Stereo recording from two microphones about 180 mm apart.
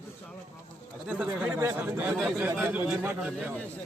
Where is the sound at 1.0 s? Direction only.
5° right (ahead or behind).